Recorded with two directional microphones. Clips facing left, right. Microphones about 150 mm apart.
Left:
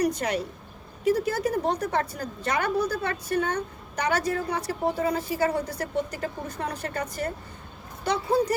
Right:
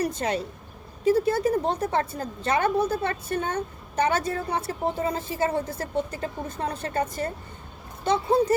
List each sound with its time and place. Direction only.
0.0 s a woman's voice: 25° right (ahead or behind)